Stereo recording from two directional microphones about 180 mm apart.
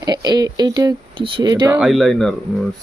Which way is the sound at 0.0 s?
20° right (ahead or behind).